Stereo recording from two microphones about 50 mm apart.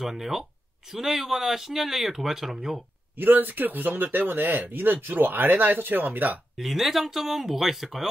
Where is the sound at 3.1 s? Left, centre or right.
Right.